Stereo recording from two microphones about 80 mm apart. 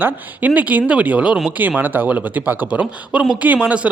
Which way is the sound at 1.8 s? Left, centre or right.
Right.